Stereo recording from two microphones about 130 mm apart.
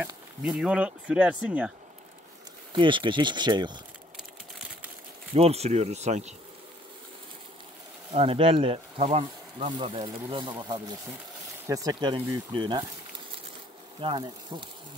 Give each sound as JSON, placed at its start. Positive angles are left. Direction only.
{"t": 0.5, "sound": "speech", "side_deg": -5}
{"t": 2.7, "sound": "speech", "side_deg": -40}
{"t": 5.3, "sound": "speech", "side_deg": -50}
{"t": 8.1, "sound": "speech", "side_deg": -45}
{"t": 9.0, "sound": "speech", "side_deg": -55}
{"t": 9.7, "sound": "speech", "side_deg": -40}
{"t": 14.0, "sound": "speech", "side_deg": -40}